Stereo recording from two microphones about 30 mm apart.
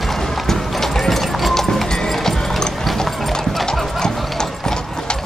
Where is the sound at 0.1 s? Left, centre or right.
Centre.